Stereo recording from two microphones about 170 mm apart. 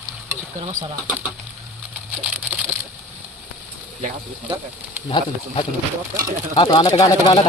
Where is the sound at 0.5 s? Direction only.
40° right (ahead or behind).